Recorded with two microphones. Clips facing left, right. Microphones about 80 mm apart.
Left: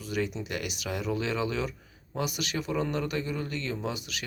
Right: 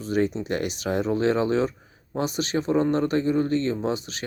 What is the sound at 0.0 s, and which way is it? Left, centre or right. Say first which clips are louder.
A man's voice: right 8 dB; right.